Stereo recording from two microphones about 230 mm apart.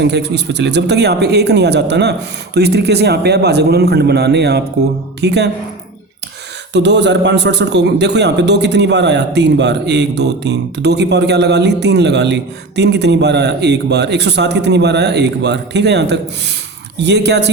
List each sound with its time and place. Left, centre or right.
0.0 s a man's voice: right
6.7 s a man's voice: right